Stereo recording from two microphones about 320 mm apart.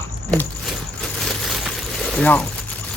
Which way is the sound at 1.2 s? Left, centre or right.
Centre.